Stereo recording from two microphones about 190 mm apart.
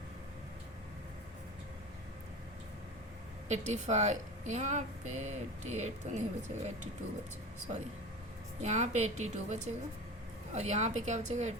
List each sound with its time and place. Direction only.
3.5 s a woman's voice: 40° right (ahead or behind)
8.6 s a woman's voice: 40° right (ahead or behind)